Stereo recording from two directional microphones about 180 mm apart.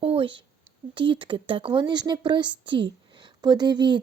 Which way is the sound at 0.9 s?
30° right (ahead or behind).